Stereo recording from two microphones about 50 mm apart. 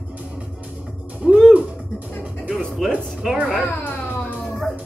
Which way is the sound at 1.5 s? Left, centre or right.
Right.